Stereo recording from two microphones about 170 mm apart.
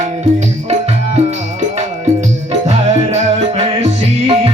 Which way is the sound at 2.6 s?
40° right (ahead or behind).